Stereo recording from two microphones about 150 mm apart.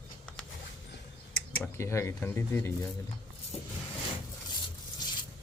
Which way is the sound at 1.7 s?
20° left (ahead or behind).